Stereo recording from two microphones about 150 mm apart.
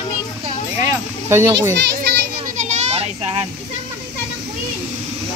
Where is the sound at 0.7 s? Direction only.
20° right (ahead or behind).